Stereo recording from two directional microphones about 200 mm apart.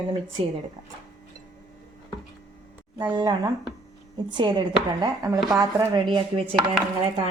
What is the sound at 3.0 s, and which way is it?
Speech, 20° right (ahead or behind).